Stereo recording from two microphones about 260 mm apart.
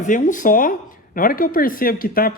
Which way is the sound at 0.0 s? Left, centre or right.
Left.